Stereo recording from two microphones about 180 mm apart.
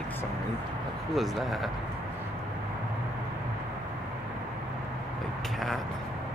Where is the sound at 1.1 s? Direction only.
Centre (ahead or behind).